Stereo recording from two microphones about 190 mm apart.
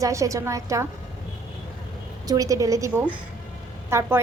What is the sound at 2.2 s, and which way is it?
A woman's voice, 20° right (ahead or behind).